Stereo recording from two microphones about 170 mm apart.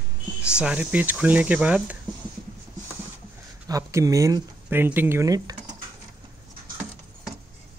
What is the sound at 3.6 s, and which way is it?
Speech, 20° right (ahead or behind).